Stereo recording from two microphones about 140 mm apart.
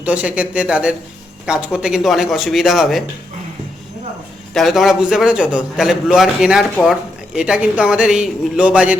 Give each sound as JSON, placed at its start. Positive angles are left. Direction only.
{"t": 0.0, "sound": "a man's voice", "side_deg": -10}
{"t": 4.5, "sound": "a man's voice", "side_deg": 0}